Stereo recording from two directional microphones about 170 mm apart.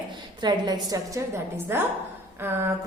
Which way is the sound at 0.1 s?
25° right (ahead or behind).